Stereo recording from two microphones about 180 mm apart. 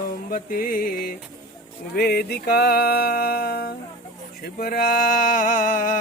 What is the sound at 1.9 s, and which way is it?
Music, 60° left (ahead or behind).